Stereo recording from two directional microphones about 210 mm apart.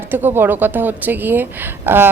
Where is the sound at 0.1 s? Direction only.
10° right (ahead or behind).